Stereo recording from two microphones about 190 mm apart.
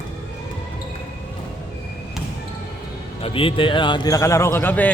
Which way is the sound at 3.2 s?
30° left (ahead or behind).